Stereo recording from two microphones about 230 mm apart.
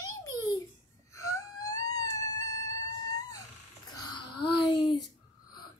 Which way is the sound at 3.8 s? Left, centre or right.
Centre.